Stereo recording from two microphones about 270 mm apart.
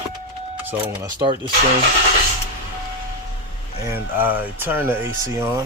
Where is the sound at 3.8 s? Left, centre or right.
Centre.